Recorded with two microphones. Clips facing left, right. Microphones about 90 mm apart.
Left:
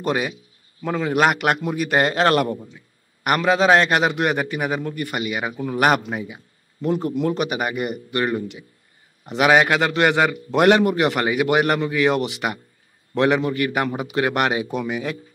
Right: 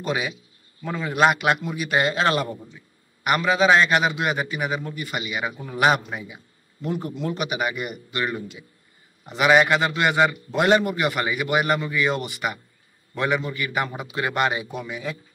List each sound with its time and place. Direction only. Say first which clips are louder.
0.0 s a man's voice: left 4 dB; 50° left (ahead or behind)
9.3 s a man's voice: left 1 dB; 60° left (ahead or behind)